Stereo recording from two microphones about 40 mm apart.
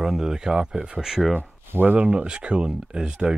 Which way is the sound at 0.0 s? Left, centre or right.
Centre.